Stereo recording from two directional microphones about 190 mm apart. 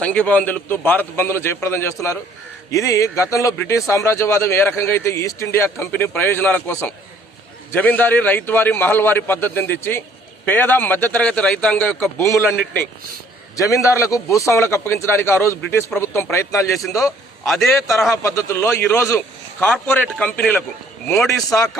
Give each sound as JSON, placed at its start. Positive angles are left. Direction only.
{"t": 0.0, "sound": "a man's voice", "side_deg": 5}
{"t": 13.6, "sound": "a man's voice", "side_deg": 15}
{"t": 17.4, "sound": "a man's voice", "side_deg": 0}
{"t": 18.1, "sound": "a man's voice", "side_deg": 15}
{"t": 21.2, "sound": "a man's voice", "side_deg": 15}